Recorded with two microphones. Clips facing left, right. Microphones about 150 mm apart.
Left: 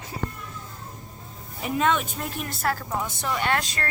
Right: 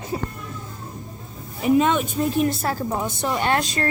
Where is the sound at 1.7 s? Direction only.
15° right (ahead or behind).